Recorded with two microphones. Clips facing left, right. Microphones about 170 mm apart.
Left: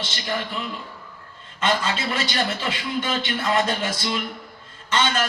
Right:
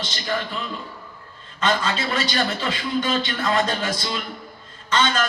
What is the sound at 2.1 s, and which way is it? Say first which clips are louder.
A man's voice: right 2 dB; 20° left (ahead or behind).